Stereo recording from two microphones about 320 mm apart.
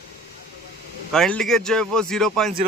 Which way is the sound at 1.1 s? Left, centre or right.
Centre.